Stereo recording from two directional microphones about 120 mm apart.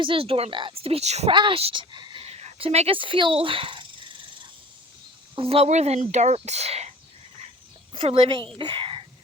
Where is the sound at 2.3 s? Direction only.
60° right (ahead or behind); by 4.5 s 45° right (ahead or behind).